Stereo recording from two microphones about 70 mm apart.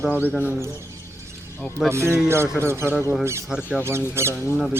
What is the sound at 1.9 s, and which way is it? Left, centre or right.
Speech, right.